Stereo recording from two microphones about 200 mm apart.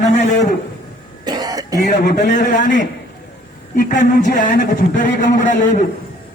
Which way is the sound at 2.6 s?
65° left (ahead or behind).